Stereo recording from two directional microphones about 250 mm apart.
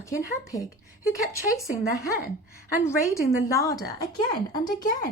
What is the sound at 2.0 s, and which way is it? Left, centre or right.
Speech, left.